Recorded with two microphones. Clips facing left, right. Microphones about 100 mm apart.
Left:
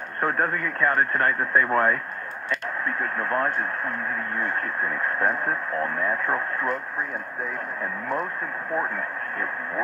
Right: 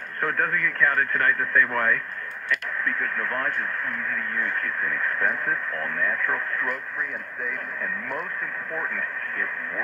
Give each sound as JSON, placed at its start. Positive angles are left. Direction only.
{"t": 0.2, "sound": "speech", "side_deg": 25}